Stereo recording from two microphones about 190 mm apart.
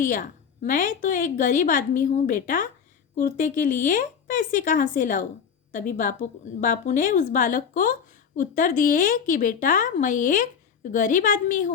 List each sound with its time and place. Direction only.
0.0 s a woman's voice: 45° left (ahead or behind)